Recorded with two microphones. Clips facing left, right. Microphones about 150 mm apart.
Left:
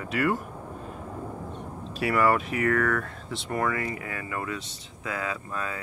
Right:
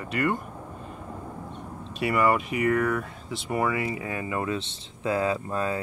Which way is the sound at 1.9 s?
Centre (ahead or behind).